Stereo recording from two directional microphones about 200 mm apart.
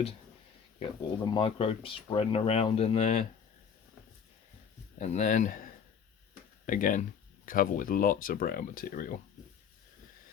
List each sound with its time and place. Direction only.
0.8 s speech: 25° left (ahead or behind)
4.9 s speech: 35° left (ahead or behind)